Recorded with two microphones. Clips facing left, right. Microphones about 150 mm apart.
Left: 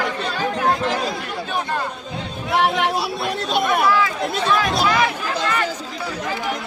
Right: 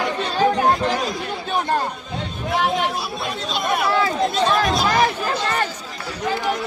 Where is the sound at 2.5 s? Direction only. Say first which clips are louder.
Left 2 dB; 65° left (ahead or behind).